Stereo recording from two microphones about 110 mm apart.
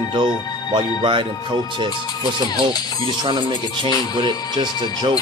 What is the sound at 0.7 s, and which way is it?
Speech, 50° right (ahead or behind).